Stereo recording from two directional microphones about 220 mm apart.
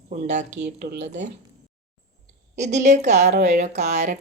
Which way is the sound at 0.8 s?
50° right (ahead or behind).